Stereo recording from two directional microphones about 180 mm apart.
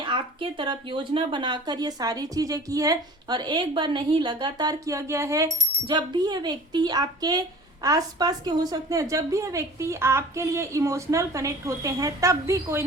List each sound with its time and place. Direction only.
0.0 s speech: 25° right (ahead or behind)